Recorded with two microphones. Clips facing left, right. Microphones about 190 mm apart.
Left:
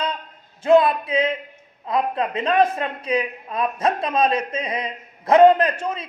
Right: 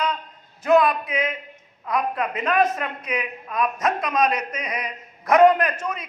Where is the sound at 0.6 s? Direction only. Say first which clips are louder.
Left 2 dB; 30° left (ahead or behind).